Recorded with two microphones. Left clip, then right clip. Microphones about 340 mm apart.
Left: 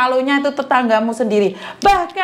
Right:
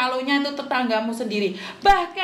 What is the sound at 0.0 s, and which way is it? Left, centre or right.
A woman's voice, left.